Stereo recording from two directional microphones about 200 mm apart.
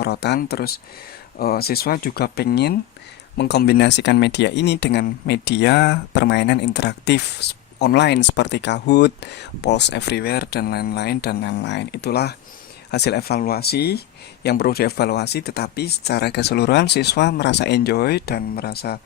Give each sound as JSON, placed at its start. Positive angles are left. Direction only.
{"t": 0.0, "sound": "speech", "side_deg": 55}